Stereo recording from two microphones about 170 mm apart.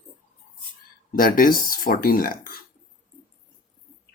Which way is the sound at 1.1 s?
55° left (ahead or behind).